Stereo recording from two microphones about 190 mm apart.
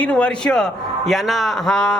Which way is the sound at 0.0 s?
5° left (ahead or behind).